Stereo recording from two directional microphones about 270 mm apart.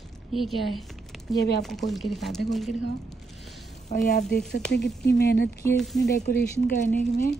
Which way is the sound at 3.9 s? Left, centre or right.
Left.